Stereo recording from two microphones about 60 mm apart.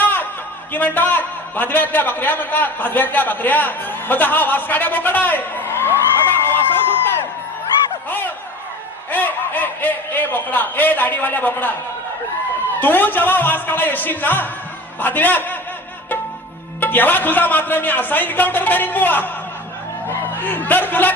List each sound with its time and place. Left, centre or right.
0.0 s a sound: left
0.7 s a man's voice: left
6.2 s a sound: left
9.1 s speech: left
12.8 s a man's voice: left
16.8 s a man's voice: left